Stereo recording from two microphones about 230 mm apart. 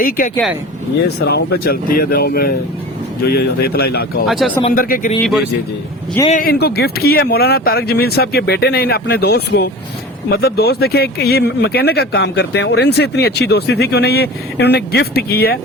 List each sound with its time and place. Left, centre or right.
1.2 s speech: left
4.3 s speech: centre
4.7 s speech: left
6.2 s speech: left